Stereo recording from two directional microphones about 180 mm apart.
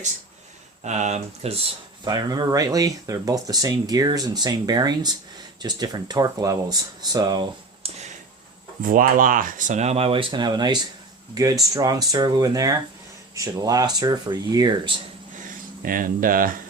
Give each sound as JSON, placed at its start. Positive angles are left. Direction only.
{"t": 0.9, "sound": "speech", "side_deg": -40}
{"t": 2.0, "sound": "speech", "side_deg": -25}
{"t": 8.8, "sound": "speech", "side_deg": -50}
{"t": 15.8, "sound": "speech", "side_deg": -50}